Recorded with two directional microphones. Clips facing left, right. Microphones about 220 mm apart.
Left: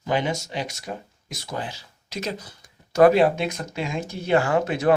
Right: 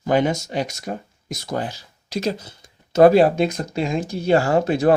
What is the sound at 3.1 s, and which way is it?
Speech, 35° right (ahead or behind).